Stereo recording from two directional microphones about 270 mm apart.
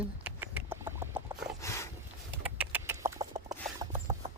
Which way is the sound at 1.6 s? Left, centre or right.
Centre.